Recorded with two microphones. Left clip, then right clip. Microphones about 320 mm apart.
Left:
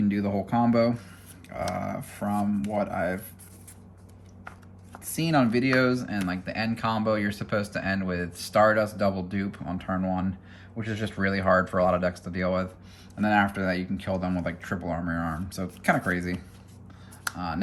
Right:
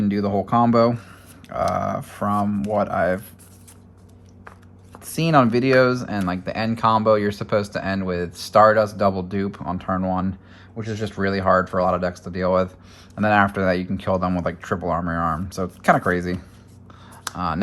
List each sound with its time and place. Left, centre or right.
0.1 s speech: centre
5.0 s speech: right